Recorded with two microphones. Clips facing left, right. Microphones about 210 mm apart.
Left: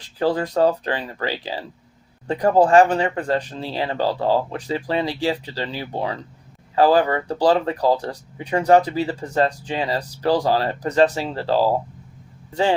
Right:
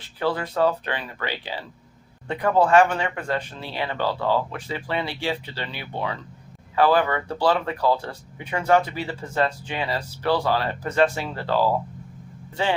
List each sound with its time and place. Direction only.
0.2 s speech: 40° left (ahead or behind)